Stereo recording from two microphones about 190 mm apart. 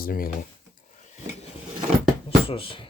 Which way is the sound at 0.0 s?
50° left (ahead or behind).